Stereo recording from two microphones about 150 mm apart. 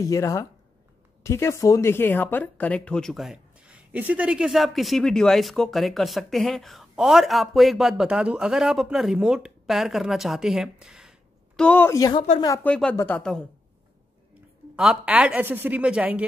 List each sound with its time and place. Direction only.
0.0 s speech: 20° left (ahead or behind); by 11.6 s 5° right (ahead or behind)
11.6 s a woman's voice: 10° left (ahead or behind)
12.6 s a woman's voice: 5° left (ahead or behind)
13.2 s speech: 5° left (ahead or behind)
14.8 s a woman's voice: 5° right (ahead or behind)